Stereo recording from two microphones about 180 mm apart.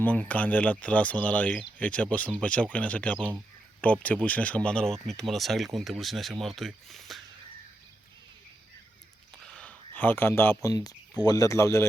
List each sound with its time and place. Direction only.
0.0 s speech: 10° left (ahead or behind)
9.5 s speech: 5° left (ahead or behind)